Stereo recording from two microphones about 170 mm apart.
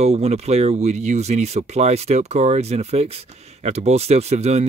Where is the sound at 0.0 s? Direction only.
40° right (ahead or behind).